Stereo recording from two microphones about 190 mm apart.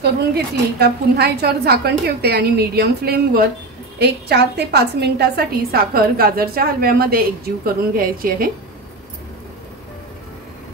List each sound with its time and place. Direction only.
0.0 s a woman's voice: 60° right (ahead or behind)